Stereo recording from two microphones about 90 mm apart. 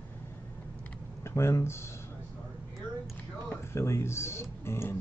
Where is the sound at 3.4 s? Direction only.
30° left (ahead or behind).